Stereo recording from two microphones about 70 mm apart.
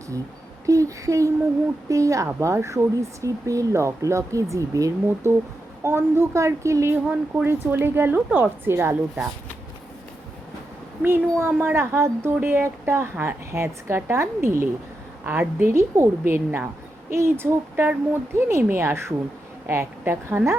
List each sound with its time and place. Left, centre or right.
0.6 s speech: right
5.0 s speech: right
6.9 s speech: right
11.0 s speech: right
15.2 s a woman's voice: right
15.7 s speech: right